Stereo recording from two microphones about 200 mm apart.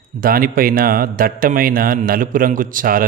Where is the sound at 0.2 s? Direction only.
45° right (ahead or behind).